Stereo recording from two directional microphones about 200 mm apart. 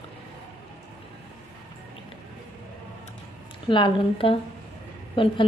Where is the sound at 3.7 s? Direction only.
25° left (ahead or behind).